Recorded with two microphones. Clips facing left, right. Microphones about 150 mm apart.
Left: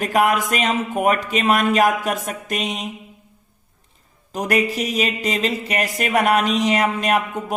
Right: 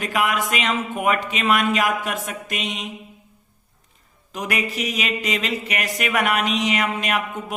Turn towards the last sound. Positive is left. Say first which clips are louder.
# left 4 dB
turn(degrees=35)  # may be behind; listen again after turning